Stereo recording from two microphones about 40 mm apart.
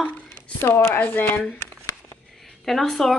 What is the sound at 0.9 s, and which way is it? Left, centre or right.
Speech, left.